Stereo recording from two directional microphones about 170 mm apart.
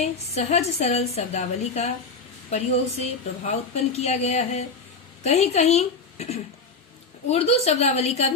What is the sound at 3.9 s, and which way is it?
A woman's voice, 40° left (ahead or behind).